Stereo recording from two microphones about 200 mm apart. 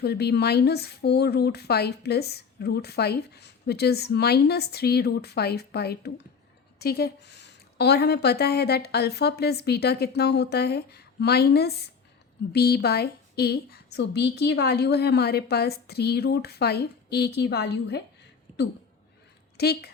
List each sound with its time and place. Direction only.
0.0 s a woman's voice: 55° left (ahead or behind)
19.5 s speech: 55° left (ahead or behind)